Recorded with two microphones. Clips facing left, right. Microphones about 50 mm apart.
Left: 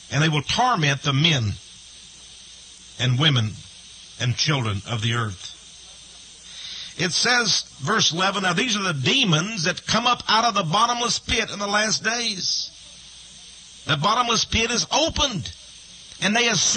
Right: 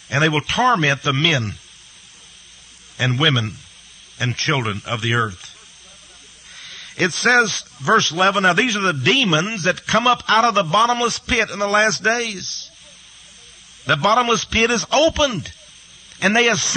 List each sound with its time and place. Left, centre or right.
0.1 s a man's voice: right
3.0 s a man's voice: right
4.6 s speech: right
6.5 s a sound: right
7.8 s a man's voice: right
14.0 s a man's voice: right